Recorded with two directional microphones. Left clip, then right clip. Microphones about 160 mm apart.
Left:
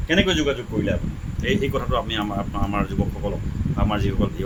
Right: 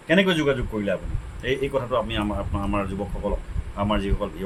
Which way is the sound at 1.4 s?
25° left (ahead or behind).